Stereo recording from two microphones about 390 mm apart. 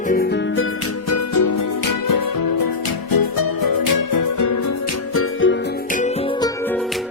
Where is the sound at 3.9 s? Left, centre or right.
Left.